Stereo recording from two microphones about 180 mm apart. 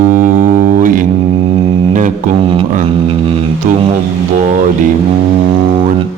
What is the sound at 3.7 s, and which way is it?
Speech, 45° right (ahead or behind).